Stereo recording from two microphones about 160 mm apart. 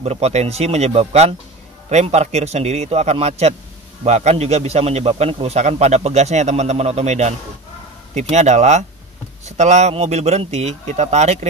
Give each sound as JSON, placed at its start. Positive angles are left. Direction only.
{"t": 0.0, "sound": "a man's voice", "side_deg": -40}